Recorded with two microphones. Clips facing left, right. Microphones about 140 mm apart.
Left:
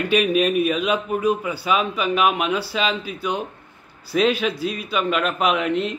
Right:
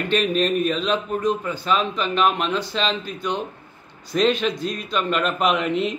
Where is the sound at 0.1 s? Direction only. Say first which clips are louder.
Left 2 dB; 10° left (ahead or behind).